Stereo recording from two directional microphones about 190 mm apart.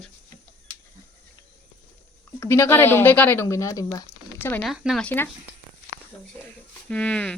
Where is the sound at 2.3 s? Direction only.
15° left (ahead or behind).